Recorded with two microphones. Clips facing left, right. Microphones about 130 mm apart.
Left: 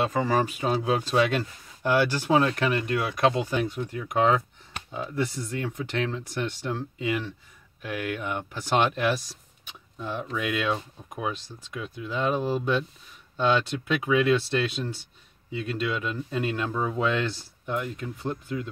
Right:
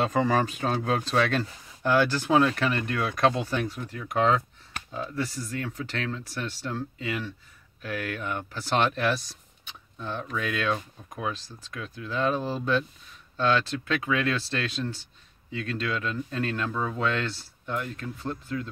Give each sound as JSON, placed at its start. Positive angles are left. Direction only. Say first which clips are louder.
{"t": 0.0, "sound": "speech", "louder": "even", "side_deg": 5}